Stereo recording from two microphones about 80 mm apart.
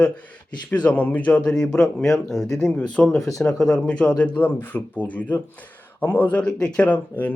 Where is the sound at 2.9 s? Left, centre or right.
Centre.